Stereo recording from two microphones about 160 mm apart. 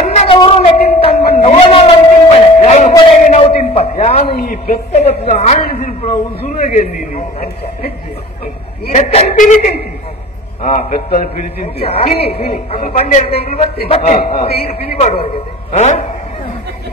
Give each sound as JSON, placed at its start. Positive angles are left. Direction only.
{"t": 0.0, "sound": "a sound", "side_deg": 45}
{"t": 0.3, "sound": "a sound", "side_deg": 35}
{"t": 4.3, "sound": "a woman's voice", "side_deg": 70}
{"t": 4.9, "sound": "a woman's voice", "side_deg": 40}
{"t": 8.9, "sound": "a woman's voice", "side_deg": 45}
{"t": 12.2, "sound": "a woman's voice", "side_deg": 75}
{"t": 12.9, "sound": "a woman's voice", "side_deg": 50}